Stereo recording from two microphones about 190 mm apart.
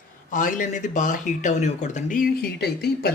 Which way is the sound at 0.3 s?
45° left (ahead or behind).